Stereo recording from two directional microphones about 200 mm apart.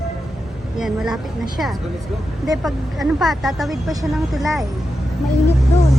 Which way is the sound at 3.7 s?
15° right (ahead or behind).